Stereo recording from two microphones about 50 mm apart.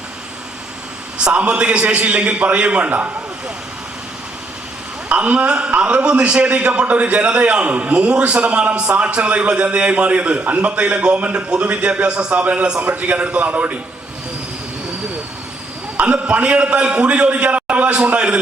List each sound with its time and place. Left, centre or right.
1.2 s a man's voice: right
5.0 s a man's voice: right
16.0 s a man's voice: right